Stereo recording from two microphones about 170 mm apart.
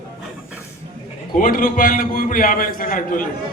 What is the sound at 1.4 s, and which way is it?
A man's voice, 55° left (ahead or behind).